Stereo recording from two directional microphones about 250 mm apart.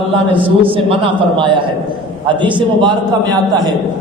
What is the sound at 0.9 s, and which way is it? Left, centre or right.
A man's voice, centre.